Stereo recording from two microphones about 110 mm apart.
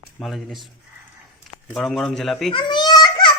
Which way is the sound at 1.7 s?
5° left (ahead or behind).